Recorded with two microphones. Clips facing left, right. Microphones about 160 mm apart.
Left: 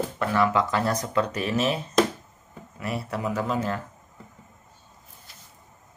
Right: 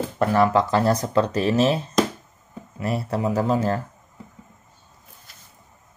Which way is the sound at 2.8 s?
35° right (ahead or behind).